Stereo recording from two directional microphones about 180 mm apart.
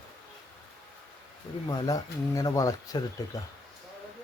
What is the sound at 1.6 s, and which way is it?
Speech, 20° left (ahead or behind).